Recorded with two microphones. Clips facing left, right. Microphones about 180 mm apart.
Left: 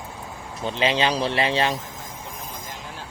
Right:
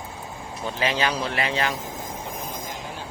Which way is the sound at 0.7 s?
25° left (ahead or behind).